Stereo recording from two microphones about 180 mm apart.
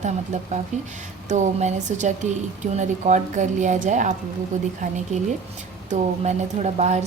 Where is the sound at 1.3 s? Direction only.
40° right (ahead or behind).